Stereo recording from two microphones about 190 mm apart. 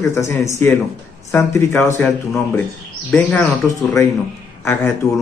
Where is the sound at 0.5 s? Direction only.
10° left (ahead or behind).